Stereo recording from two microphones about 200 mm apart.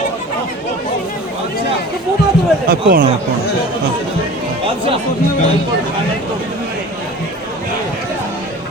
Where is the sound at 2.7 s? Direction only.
50° right (ahead or behind).